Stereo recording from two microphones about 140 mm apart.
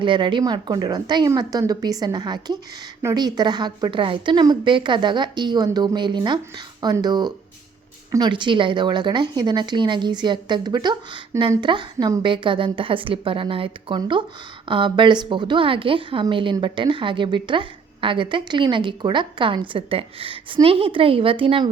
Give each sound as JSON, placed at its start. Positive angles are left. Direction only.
{"t": 0.0, "sound": "a woman's voice", "side_deg": -35}